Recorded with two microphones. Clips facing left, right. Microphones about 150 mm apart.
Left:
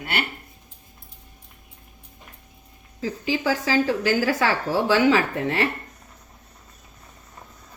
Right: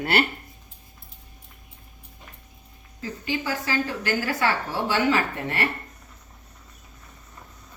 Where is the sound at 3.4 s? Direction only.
90° left.